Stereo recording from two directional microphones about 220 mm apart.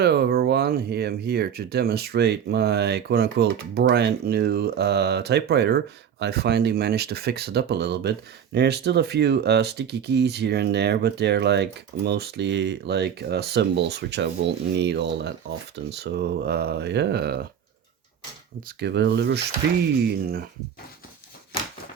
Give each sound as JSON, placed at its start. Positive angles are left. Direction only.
{"t": 0.0, "sound": "speech", "side_deg": -50}
{"t": 18.8, "sound": "speech", "side_deg": -50}